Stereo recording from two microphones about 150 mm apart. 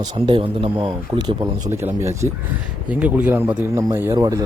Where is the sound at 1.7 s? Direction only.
15° right (ahead or behind).